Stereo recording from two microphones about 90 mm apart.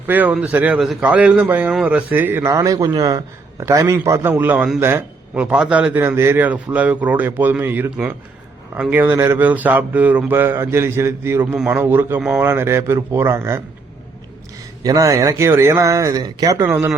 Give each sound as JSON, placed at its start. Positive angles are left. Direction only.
{"t": 0.1, "sound": "a man's voice", "side_deg": -20}
{"t": 2.5, "sound": "a man's voice", "side_deg": -40}
{"t": 5.9, "sound": "speech", "side_deg": -25}
{"t": 9.1, "sound": "a man's voice", "side_deg": -30}
{"t": 9.4, "sound": "speech", "side_deg": -20}
{"t": 14.8, "sound": "a man's voice", "side_deg": -40}